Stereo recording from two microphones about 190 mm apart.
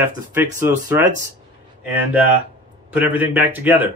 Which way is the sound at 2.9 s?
10° right (ahead or behind).